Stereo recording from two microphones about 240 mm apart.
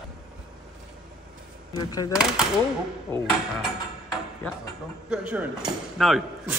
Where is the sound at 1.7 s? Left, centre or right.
Centre.